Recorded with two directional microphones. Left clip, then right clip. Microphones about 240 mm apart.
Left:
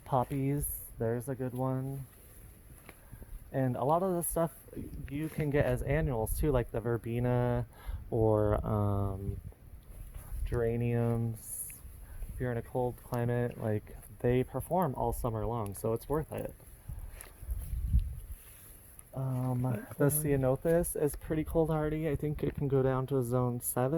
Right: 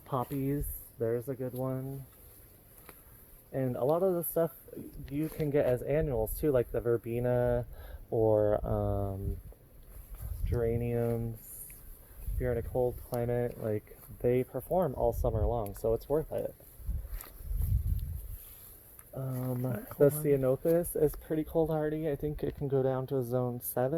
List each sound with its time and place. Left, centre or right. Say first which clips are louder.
0.0 s a sound: left 4 dB; left
0.4 s speech: right 1 dB; left
3.5 s speech: even; left
10.4 s speech: even; left
12.4 s speech: right 3 dB; left
15.2 s speech: right 3 dB; left
20.2 s speech: right 2 dB; left